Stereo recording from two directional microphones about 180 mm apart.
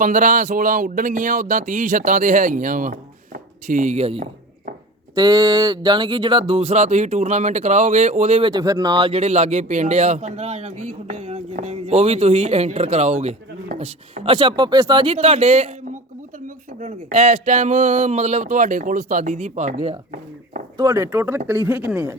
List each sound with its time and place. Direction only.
0.0 s speech: 45° right (ahead or behind)
5.1 s speech: 20° right (ahead or behind); by 8.4 s 40° right (ahead or behind)
8.4 s speech: 20° right (ahead or behind)
16.8 s speech: 40° right (ahead or behind)
20.7 s speech: 15° right (ahead or behind)